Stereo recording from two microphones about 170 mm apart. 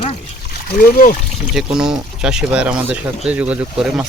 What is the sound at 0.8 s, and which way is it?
Speech, 55° left (ahead or behind).